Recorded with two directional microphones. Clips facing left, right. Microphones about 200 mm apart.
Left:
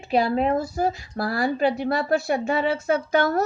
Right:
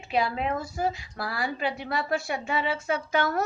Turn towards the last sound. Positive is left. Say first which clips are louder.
# left 5 dB
turn(degrees=40)  # may be behind; listen again after turning